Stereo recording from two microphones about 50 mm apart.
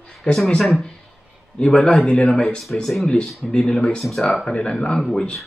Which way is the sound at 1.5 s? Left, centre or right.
Centre.